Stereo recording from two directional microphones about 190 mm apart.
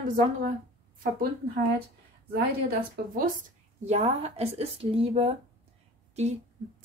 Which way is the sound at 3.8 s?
35° right (ahead or behind).